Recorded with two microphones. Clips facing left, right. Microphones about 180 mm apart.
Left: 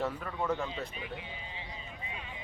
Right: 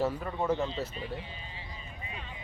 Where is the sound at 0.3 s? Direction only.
20° right (ahead or behind).